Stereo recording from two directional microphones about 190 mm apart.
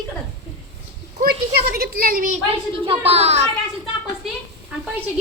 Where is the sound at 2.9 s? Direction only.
35° right (ahead or behind).